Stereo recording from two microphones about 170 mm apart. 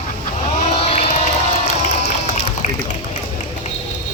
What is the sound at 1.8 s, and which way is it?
Run, 45° left (ahead or behind).